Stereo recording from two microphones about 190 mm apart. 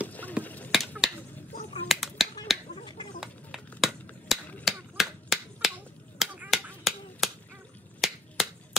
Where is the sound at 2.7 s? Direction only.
25° left (ahead or behind).